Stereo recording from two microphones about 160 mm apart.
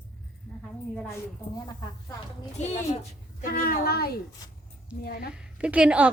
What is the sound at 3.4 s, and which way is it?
A child's voice, 60° left (ahead or behind).